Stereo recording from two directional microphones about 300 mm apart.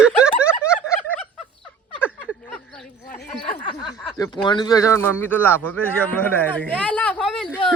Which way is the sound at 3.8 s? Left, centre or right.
Centre.